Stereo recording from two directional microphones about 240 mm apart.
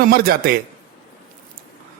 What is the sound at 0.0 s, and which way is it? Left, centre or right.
Speech, right.